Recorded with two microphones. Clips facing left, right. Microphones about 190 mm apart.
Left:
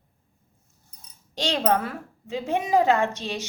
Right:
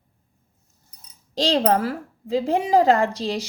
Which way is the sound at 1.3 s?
35° right (ahead or behind).